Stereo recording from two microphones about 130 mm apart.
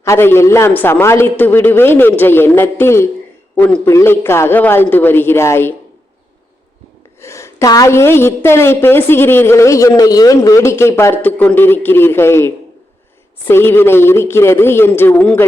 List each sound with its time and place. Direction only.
0.0 s a man's voice: 20° left (ahead or behind)
7.2 s a woman's voice: 20° left (ahead or behind)